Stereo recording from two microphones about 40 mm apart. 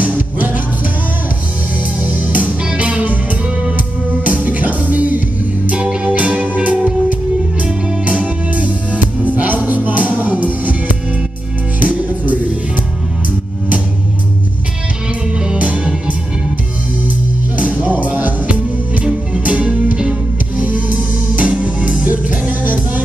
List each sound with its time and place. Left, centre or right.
0.0 s music: right
2.0 s music: right
4.3 s music: right
5.7 s music: right
15.3 s music: centre
15.6 s music: right
17.6 s music: right
19.4 s music: right
22.5 s music: right